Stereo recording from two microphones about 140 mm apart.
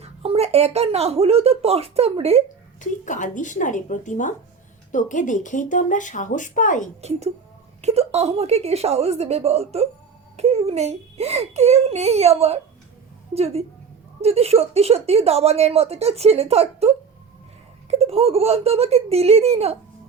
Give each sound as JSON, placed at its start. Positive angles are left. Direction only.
{"t": 0.0, "sound": "speech", "side_deg": -45}
{"t": 3.0, "sound": "speech", "side_deg": 65}
{"t": 7.8, "sound": "speech", "side_deg": -50}
{"t": 17.9, "sound": "speech", "side_deg": -45}